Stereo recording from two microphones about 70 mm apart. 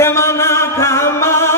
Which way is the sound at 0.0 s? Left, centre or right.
Left.